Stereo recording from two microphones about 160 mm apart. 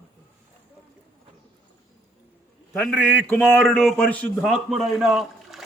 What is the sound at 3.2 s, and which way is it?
A man's voice, 5° left (ahead or behind).